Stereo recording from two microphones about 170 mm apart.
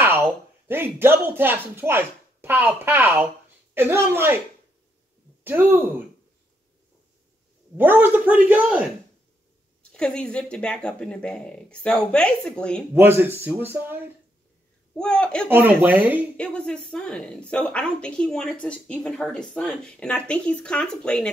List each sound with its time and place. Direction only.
0.0 s a man's voice: 15° right (ahead or behind)
5.4 s a man's voice: 10° right (ahead or behind)
7.7 s a man's voice: 10° right (ahead or behind)
9.9 s a woman's voice: 5° left (ahead or behind)
12.9 s a man's voice: 15° right (ahead or behind)
15.0 s a woman's voice: 5° left (ahead or behind)
15.4 s a man's voice: 10° right (ahead or behind)
16.3 s a woman's voice: 5° left (ahead or behind)